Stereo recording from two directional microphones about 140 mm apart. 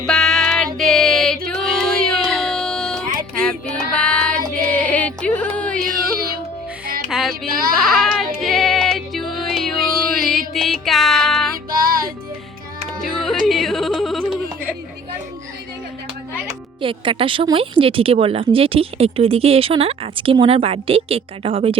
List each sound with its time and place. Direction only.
0.1 s music: 5° left (ahead or behind)
3.4 s female singing: 5° left (ahead or behind)
4.8 s a sound: 10° left (ahead or behind)
6.8 s music: 90° right
7.1 s child singing: centre (ahead or behind)
7.5 s speech: 90° right
7.8 s music: centre (ahead or behind)
11.5 s music: 90° right
13.0 s music: centre (ahead or behind)
13.4 s yodeling: centre (ahead or behind)
16.8 s a woman's voice: 40° right (ahead or behind)